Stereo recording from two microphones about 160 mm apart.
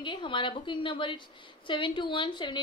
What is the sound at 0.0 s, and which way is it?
A woman's voice, 30° left (ahead or behind).